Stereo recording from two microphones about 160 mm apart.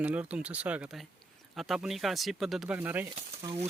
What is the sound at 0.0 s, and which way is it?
Speech, 10° right (ahead or behind).